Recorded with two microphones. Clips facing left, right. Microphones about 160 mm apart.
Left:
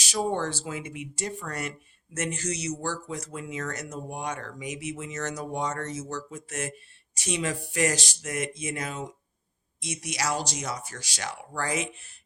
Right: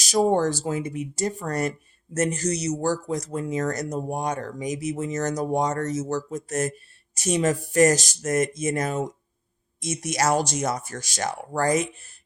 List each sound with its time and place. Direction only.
0.0 s speech: 40° right (ahead or behind)